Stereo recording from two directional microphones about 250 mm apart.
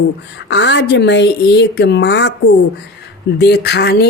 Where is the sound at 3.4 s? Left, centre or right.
Left.